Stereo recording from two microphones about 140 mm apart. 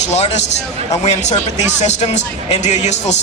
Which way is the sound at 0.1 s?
55° left (ahead or behind).